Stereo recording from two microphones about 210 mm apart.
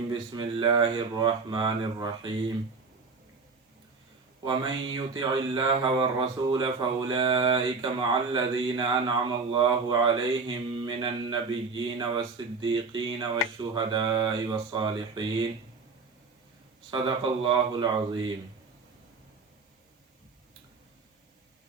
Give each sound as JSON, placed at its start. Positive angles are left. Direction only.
{"t": 0.1, "sound": "speech", "side_deg": -20}
{"t": 4.4, "sound": "speech", "side_deg": -25}
{"t": 17.4, "sound": "speech", "side_deg": -20}